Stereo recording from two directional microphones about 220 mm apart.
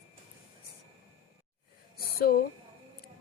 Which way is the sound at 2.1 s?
45° left (ahead or behind).